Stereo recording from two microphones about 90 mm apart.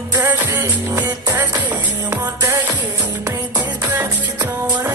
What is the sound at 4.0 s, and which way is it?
Music, 25° right (ahead or behind).